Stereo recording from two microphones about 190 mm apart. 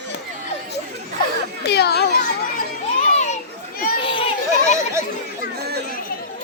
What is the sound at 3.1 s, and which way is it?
Children playing, 35° left (ahead or behind).